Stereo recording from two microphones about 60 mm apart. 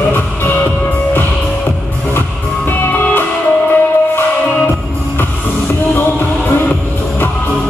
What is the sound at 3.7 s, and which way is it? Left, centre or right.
Music, left.